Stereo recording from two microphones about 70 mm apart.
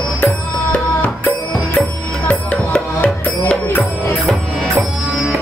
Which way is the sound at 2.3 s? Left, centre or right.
Centre.